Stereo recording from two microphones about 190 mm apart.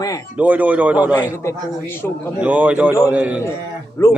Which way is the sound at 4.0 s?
15° left (ahead or behind).